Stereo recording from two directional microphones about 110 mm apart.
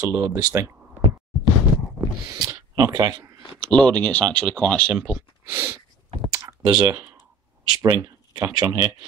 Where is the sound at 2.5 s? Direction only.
35° right (ahead or behind).